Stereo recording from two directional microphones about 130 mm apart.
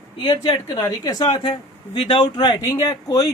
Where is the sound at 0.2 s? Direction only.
35° left (ahead or behind).